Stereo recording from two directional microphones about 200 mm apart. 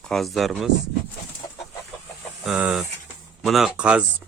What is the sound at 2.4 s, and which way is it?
Speech, 5° right (ahead or behind).